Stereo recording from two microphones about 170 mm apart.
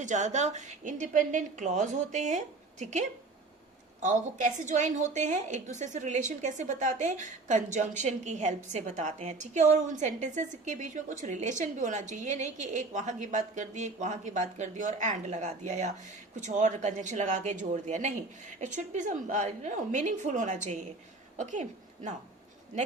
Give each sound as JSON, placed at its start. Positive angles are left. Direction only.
{"t": 0.0, "sound": "a woman's voice", "side_deg": -45}
{"t": 4.0, "sound": "a woman's voice", "side_deg": -45}